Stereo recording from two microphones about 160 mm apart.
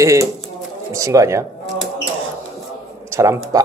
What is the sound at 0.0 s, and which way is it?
Speech, 20° right (ahead or behind).